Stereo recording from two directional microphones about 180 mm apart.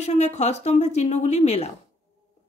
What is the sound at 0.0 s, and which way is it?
Speech, 35° left (ahead or behind).